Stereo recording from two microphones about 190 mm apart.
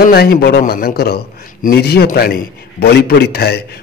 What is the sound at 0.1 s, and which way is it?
A man's voice, 55° left (ahead or behind).